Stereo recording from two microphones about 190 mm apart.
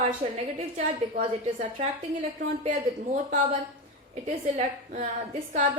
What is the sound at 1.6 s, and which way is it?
A woman's voice, 40° right (ahead or behind).